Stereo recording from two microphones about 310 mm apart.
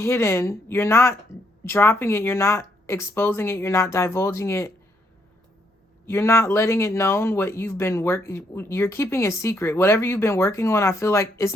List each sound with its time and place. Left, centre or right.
0.0 s speech: centre
6.1 s speech: centre